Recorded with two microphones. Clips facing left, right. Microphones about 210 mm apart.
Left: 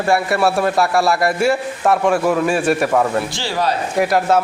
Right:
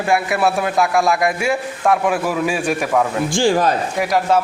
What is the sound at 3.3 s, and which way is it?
Speech, 50° right (ahead or behind).